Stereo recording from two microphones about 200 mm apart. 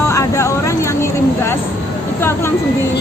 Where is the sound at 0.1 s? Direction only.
15° left (ahead or behind).